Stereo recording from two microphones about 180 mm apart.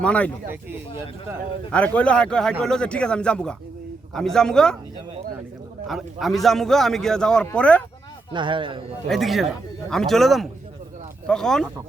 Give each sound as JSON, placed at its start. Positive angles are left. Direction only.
{"t": 0.0, "sound": "speech", "side_deg": 5}
{"t": 1.7, "sound": "speech", "side_deg": 5}
{"t": 5.9, "sound": "speech", "side_deg": 0}
{"t": 8.3, "sound": "speech", "side_deg": -25}
{"t": 9.0, "sound": "speech", "side_deg": 0}